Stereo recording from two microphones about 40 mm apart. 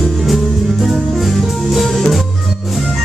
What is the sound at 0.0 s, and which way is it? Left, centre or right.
Music, centre.